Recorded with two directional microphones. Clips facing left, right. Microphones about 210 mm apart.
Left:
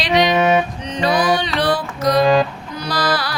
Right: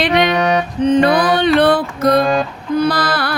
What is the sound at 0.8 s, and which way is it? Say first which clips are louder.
Music: right 7 dB; 55° right (ahead or behind).